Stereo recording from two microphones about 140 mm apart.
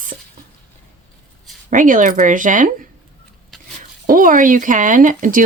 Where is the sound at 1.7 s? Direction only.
70° right (ahead or behind).